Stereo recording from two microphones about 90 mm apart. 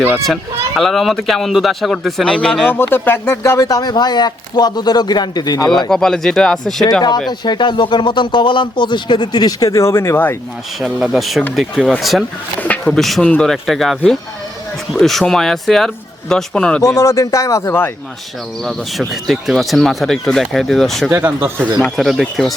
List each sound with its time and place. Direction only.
0.8 s speech: centre (ahead or behind)
2.7 s speech: 25° left (ahead or behind)
3.6 s a man's voice: 45° left (ahead or behind)
5.9 s speech: 5° left (ahead or behind)
7.3 s speech: 55° left (ahead or behind); by 10.3 s 25° left (ahead or behind)
10.8 s speech: 10° right (ahead or behind)
12.5 s speech: 15° left (ahead or behind)
12.9 s speech: centre (ahead or behind)
13.2 s speech: 15° left (ahead or behind)
13.5 s speech: centre (ahead or behind)
16.8 s a man's voice: 35° left (ahead or behind)
18.6 s speech: centre (ahead or behind)
21.1 s speech: 25° right (ahead or behind)
21.8 s speech: centre (ahead or behind)